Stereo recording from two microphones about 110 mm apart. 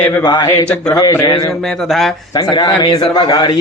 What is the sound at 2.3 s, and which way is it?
A man's voice, 40° left (ahead or behind).